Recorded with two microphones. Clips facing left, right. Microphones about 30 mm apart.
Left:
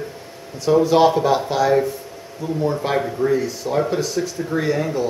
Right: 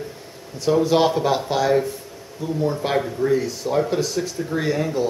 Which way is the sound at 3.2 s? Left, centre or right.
Centre.